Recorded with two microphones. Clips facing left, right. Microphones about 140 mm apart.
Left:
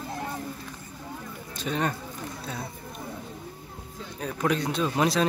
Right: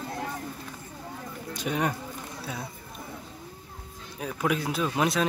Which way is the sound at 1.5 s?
10° right (ahead or behind).